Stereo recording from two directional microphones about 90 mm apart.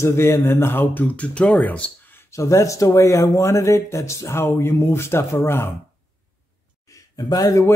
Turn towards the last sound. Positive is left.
turn(degrees=40)  # may be behind; listen again after turning